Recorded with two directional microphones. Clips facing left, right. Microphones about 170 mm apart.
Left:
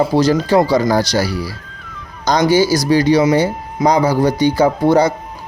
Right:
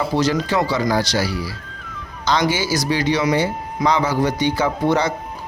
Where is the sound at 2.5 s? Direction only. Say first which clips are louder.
Left 8 dB; 40° left (ahead or behind).